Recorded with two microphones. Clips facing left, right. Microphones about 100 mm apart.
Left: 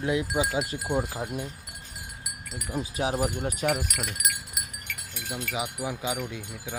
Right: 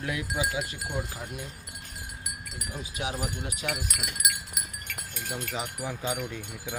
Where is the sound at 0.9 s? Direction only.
35° left (ahead or behind).